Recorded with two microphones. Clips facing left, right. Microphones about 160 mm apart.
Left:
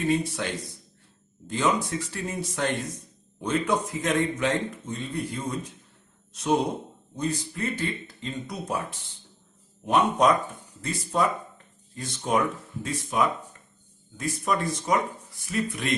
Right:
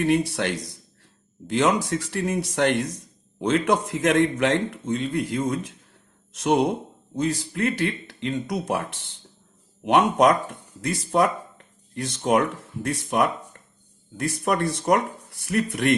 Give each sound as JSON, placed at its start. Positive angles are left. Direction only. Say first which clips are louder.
{"t": 0.0, "sound": "a man's voice", "louder": "right 4 dB", "side_deg": -75}